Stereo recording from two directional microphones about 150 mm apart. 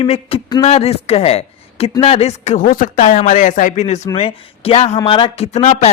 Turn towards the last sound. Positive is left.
turn(degrees=50)  # may be behind; listen again after turning